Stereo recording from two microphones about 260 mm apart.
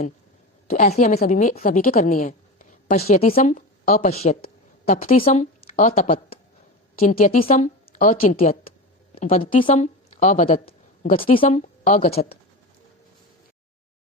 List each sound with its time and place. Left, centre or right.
0.7 s a woman's voice: left
4.4 s a sound: left
4.9 s a woman's voice: left